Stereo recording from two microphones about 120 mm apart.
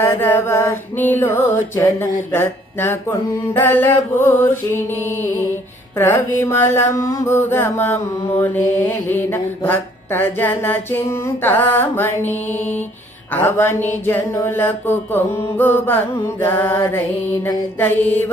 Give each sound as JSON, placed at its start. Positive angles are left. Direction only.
{"t": 0.0, "sound": "music", "side_deg": 20}
{"t": 6.0, "sound": "mantra", "side_deg": 20}